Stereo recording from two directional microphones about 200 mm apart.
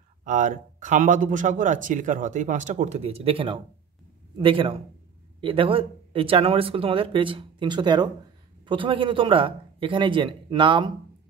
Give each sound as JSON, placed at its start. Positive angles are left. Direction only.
{"t": 0.2, "sound": "speech", "side_deg": -40}